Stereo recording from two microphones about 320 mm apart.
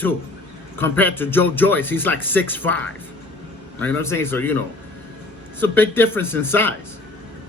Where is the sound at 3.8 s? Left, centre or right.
Centre.